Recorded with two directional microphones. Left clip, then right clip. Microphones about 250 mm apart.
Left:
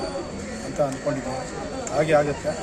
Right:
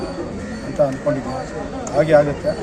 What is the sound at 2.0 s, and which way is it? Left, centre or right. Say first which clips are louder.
Speech: right 6 dB; centre.